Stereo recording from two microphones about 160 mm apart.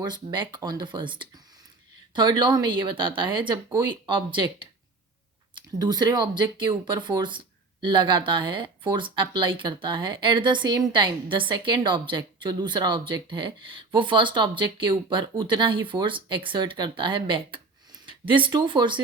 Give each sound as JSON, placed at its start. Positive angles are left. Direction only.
{"t": 0.0, "sound": "speech", "side_deg": -25}
{"t": 5.5, "sound": "speech", "side_deg": -25}